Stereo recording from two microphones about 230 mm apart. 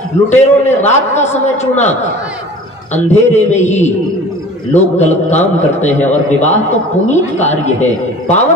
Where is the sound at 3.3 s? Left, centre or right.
Left.